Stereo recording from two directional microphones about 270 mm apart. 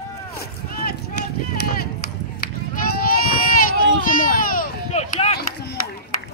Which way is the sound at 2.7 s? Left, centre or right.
Left.